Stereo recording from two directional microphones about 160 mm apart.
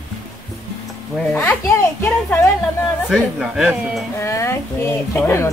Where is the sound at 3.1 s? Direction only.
Centre (ahead or behind).